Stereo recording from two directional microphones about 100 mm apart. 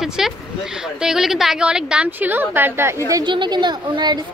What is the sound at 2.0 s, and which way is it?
Speech, 20° right (ahead or behind).